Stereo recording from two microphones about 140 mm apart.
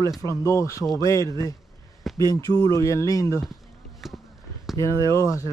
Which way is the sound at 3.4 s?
Centre (ahead or behind).